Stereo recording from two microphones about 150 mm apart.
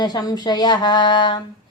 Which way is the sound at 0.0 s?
25° left (ahead or behind).